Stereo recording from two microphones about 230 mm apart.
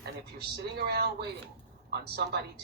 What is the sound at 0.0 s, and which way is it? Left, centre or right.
Speech, right.